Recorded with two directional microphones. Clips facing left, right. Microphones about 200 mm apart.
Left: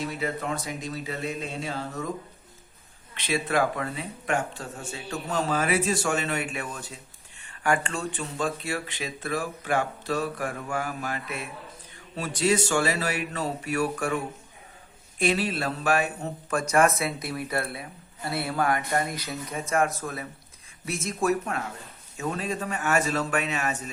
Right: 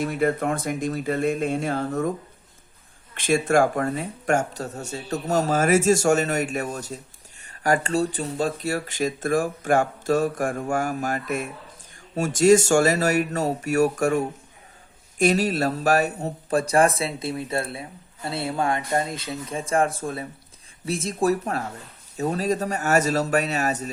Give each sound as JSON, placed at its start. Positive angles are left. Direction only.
{"t": 0.0, "sound": "speech", "side_deg": -50}
{"t": 3.2, "sound": "a man's voice", "side_deg": -45}